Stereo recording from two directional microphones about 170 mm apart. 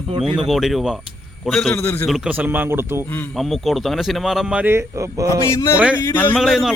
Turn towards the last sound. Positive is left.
turn(degrees=0)  # may be behind; listen again after turning